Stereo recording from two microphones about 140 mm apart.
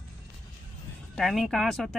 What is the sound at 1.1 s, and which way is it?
Speech, centre (ahead or behind).